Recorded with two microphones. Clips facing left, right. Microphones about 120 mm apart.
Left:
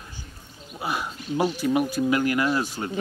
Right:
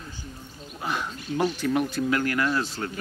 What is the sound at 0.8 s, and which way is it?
Speech, 10° left (ahead or behind).